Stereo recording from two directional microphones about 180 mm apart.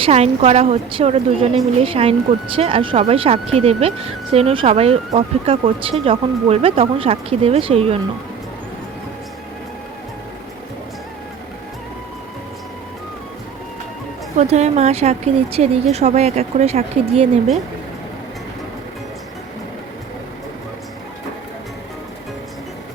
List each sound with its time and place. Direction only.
0.0 s speech: 35° right (ahead or behind)
14.3 s speech: 40° right (ahead or behind)